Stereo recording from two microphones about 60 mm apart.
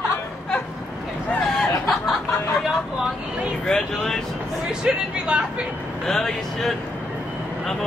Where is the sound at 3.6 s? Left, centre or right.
Centre.